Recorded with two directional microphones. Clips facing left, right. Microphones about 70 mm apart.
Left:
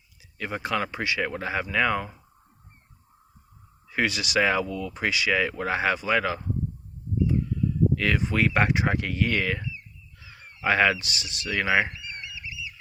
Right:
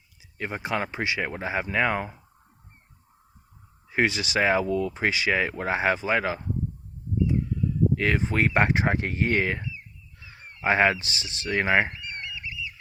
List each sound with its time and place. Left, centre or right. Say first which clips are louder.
0.3 s speech: left 1 dB; right
3.8 s speech: right 2 dB; right
7.9 s speech: even; right
10.2 s a sound: right 1 dB; right